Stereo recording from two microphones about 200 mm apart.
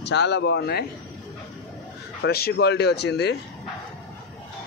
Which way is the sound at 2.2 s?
50° left (ahead or behind).